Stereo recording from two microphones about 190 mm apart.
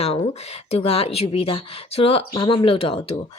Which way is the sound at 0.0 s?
35° left (ahead or behind).